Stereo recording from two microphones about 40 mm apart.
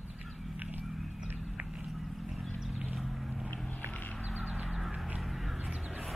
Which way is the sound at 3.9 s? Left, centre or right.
Left.